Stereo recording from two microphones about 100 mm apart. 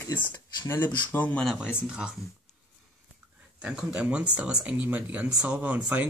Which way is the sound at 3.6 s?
10° right (ahead or behind).